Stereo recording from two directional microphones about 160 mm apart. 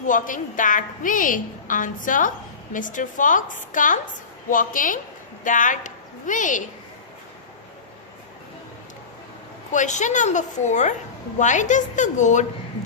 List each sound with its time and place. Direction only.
0.0 s a woman's voice: 55° left (ahead or behind)
9.7 s a woman's voice: 50° left (ahead or behind)